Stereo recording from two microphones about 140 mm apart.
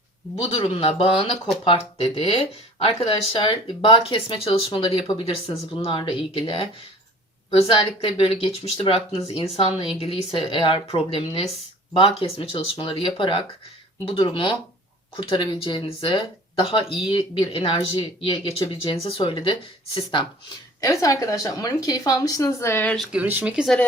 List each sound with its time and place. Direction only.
0.4 s speech: 40° left (ahead or behind)
20.8 s a woman's voice: 20° left (ahead or behind)
23.0 s speech: 10° right (ahead or behind)